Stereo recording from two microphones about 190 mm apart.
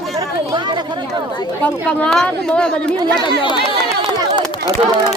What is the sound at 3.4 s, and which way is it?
Speech, 25° left (ahead or behind).